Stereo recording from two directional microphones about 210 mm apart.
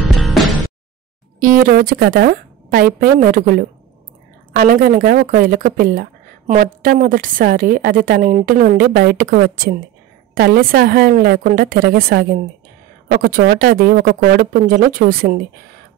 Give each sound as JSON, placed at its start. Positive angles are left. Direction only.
{"t": 0.1, "sound": "music", "side_deg": 0}
{"t": 1.4, "sound": "a woman's voice", "side_deg": -40}